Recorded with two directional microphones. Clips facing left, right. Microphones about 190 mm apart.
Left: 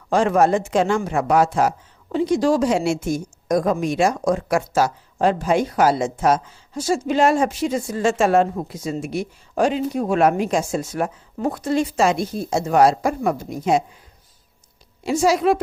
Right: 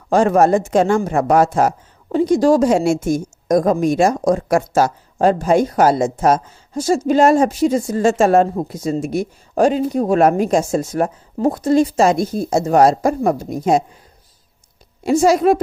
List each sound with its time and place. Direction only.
0.1 s a woman's voice: 45° right (ahead or behind)
15.0 s speech: 45° right (ahead or behind)